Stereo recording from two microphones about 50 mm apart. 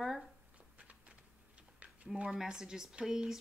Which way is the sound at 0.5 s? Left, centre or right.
Right.